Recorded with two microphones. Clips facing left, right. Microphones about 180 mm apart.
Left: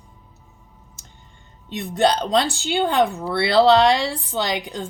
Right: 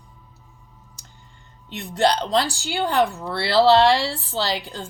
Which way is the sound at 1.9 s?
20° left (ahead or behind).